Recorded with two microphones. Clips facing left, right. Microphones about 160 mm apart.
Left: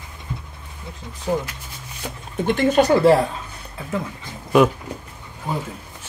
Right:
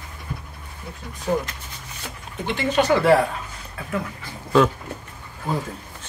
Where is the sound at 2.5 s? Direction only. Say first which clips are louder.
Left 4 dB; 45° left (ahead or behind).